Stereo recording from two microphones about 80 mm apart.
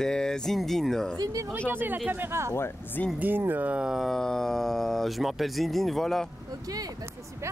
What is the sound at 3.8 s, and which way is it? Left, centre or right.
Speech, centre.